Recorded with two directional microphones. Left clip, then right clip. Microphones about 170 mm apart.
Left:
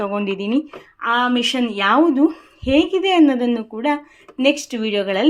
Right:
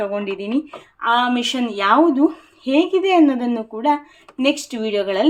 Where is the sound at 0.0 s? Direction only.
20° left (ahead or behind).